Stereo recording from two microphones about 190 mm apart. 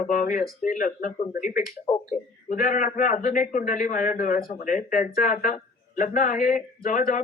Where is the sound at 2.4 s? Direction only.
45° left (ahead or behind).